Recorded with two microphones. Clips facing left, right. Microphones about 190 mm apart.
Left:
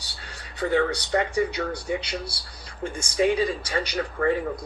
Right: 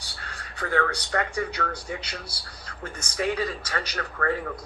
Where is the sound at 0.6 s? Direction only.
25° left (ahead or behind).